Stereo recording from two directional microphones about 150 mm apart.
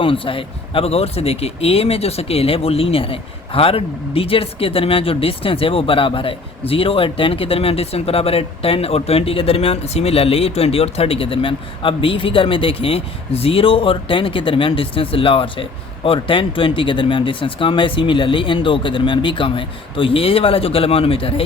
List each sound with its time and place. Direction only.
0.0 s speech: 35° left (ahead or behind)